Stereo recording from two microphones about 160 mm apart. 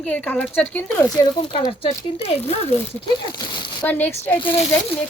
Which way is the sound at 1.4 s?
30° left (ahead or behind).